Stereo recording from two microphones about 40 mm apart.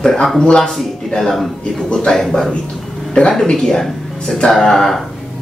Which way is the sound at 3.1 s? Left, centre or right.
Left.